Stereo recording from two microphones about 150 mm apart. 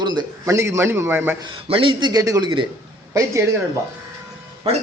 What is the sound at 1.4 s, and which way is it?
A man's voice, 35° right (ahead or behind).